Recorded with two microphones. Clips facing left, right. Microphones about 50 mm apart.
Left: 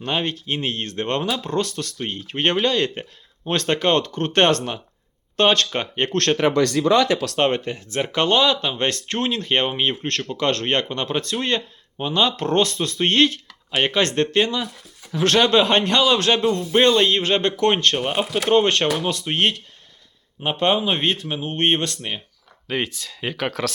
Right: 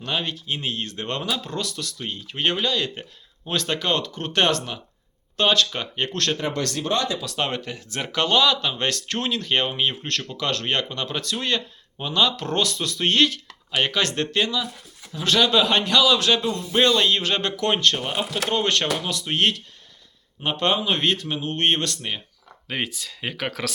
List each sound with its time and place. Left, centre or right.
0.0 s a man's voice: left
7.1 s speech: left
7.3 s a man's voice: left
11.9 s speech: centre
12.2 s a man's voice: left
15.1 s speech: left
15.4 s a man's voice: left
17.9 s a man's voice: left
22.6 s speech: centre